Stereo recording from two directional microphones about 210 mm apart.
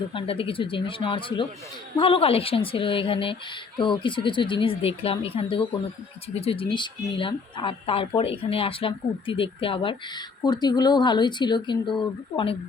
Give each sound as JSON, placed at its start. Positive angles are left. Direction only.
{"t": 0.1, "sound": "speech", "side_deg": 25}